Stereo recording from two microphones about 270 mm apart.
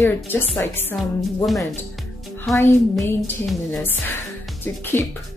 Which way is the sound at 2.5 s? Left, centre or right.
Centre.